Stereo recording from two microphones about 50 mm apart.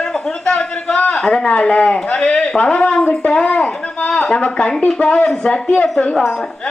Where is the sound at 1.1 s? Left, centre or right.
Centre.